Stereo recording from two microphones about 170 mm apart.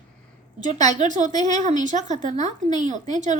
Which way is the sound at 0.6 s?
45° right (ahead or behind).